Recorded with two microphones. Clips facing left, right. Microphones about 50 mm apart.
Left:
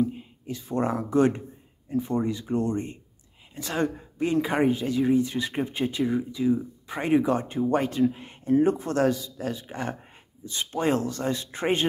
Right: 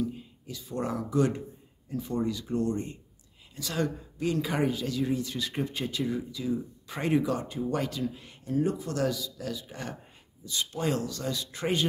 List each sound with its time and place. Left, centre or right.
0.0 s speech: left
7.2 s speech: left